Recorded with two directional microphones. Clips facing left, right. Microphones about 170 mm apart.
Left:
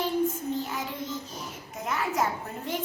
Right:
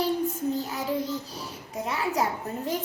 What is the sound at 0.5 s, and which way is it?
Child singing, 35° right (ahead or behind).